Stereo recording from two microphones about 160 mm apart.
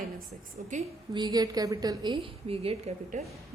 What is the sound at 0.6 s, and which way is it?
Speech, 55° right (ahead or behind).